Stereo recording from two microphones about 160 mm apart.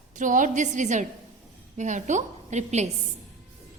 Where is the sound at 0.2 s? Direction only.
55° right (ahead or behind).